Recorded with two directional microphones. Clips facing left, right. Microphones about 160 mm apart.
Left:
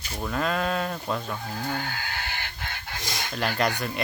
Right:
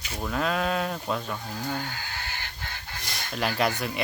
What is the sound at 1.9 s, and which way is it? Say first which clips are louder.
Wheeze: left 3 dB; 80° left.